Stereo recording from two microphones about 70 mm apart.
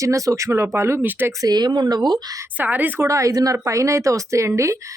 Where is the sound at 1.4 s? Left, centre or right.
Right.